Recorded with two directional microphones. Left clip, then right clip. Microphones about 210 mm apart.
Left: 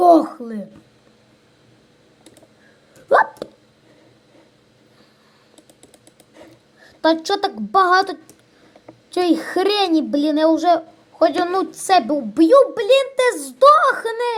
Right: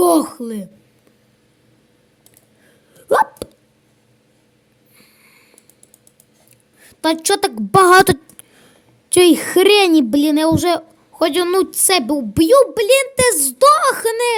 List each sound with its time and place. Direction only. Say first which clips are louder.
0.0 s a sound: left 2 dB; 65° right (ahead or behind)
3.1 s hiccup: even; 50° right (ahead or behind)
6.8 s speech: even; 55° right (ahead or behind)